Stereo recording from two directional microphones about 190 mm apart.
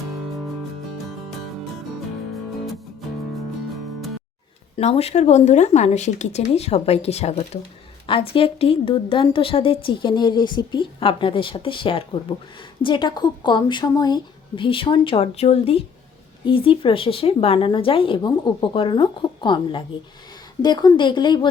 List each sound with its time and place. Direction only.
4.8 s a woman's voice: 35° left (ahead or behind)